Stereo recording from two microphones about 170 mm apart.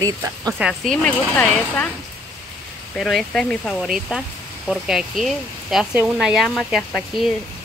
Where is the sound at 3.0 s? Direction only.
Centre (ahead or behind).